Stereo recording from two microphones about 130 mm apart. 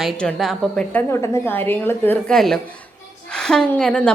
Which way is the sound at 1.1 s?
20° left (ahead or behind).